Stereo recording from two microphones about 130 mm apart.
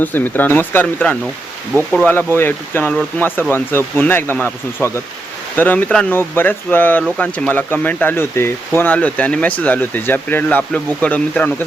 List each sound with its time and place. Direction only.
0.0 s speech: 15° left (ahead or behind)